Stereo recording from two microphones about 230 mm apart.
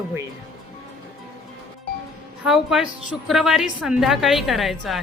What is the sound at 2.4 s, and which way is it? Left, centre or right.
Speech, centre.